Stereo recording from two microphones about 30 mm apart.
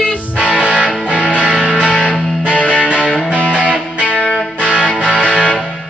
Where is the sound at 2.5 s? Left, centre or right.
Left.